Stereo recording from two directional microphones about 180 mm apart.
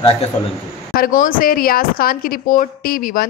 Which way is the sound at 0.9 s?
50° left (ahead or behind).